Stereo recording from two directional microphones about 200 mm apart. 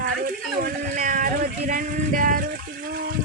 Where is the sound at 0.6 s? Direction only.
40° right (ahead or behind).